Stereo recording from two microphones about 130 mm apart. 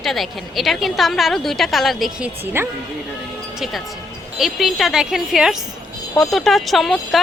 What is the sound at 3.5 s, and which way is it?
Speech, 5° right (ahead or behind).